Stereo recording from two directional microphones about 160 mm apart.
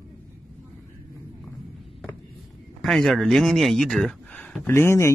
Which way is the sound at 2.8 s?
Centre (ahead or behind).